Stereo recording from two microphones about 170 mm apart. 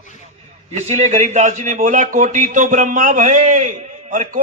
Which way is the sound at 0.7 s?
40° right (ahead or behind).